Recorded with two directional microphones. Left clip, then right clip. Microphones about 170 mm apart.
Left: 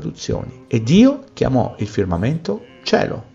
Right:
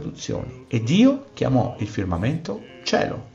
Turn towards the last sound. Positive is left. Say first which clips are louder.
# left 4 dB
turn(degrees=30)  # may be behind; listen again after turning